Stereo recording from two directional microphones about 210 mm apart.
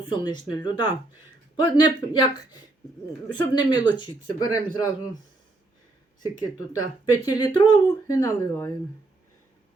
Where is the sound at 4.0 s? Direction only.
20° left (ahead or behind).